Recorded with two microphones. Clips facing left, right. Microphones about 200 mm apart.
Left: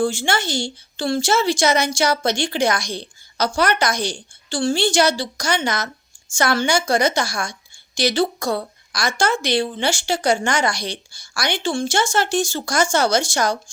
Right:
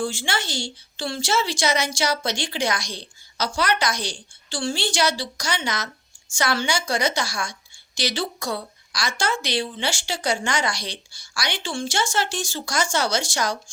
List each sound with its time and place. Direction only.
0.0 s a woman's voice: 50° left (ahead or behind)